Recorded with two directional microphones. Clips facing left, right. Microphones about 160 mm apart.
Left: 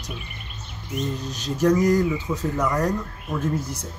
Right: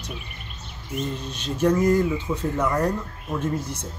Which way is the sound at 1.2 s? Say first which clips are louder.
Left 1 dB; 30° right (ahead or behind).